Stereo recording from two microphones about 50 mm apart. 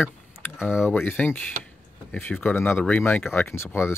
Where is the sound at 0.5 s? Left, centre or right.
Left.